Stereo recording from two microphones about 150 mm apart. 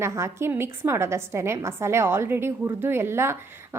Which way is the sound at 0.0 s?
20° right (ahead or behind).